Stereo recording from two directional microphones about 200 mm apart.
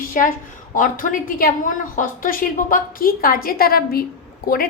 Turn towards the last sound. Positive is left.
turn(degrees=45)  # may be behind; listen again after turning